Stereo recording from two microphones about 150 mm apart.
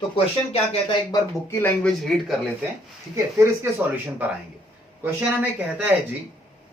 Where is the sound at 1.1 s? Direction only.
15° left (ahead or behind).